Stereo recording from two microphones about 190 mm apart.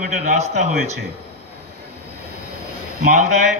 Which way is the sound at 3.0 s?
40° right (ahead or behind).